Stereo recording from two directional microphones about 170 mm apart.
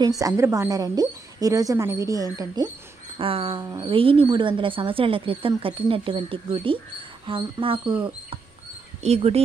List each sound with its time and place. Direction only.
0.2 s a woman's voice: 20° right (ahead or behind)
3.2 s a woman's voice: 35° right (ahead or behind)